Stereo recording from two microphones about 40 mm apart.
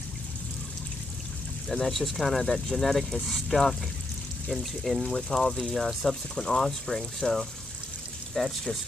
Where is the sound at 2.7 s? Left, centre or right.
Centre.